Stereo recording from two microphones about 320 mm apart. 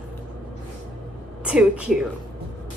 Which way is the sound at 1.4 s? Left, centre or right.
Centre.